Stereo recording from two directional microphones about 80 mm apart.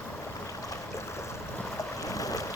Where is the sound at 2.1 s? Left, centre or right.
Left.